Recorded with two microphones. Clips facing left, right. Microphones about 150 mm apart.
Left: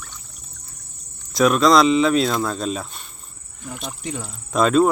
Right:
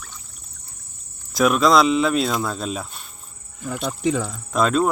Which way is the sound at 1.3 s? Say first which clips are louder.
Left 1 dB; centre (ahead or behind).